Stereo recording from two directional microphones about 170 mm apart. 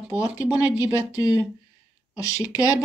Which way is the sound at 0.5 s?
10° right (ahead or behind).